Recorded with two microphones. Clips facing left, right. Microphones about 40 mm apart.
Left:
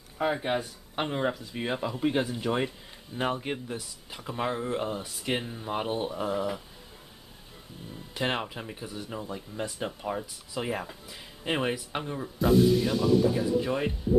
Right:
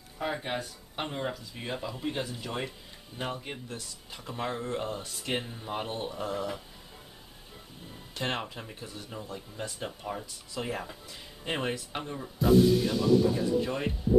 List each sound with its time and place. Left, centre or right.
0.2 s speech: centre
3.5 s speech: centre
8.1 s speech: centre